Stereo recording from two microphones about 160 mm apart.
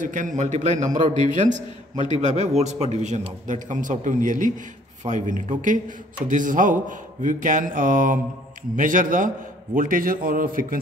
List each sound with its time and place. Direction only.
0.0 s a man's voice: 50° right (ahead or behind)